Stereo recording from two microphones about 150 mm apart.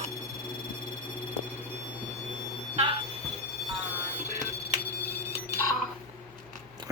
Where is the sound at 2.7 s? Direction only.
40° right (ahead or behind).